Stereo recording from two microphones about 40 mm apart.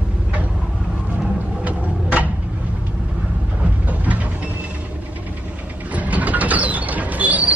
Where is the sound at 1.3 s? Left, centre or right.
Right.